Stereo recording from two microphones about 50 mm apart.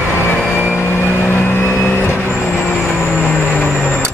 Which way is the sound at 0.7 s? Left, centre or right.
Left.